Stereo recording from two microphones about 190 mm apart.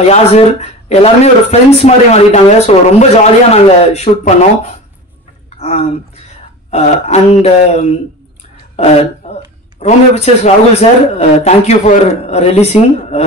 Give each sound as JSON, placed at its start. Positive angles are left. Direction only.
{"t": 0.0, "sound": "speech", "side_deg": 35}
{"t": 9.2, "sound": "a sound", "side_deg": 35}
{"t": 9.8, "sound": "speech", "side_deg": 35}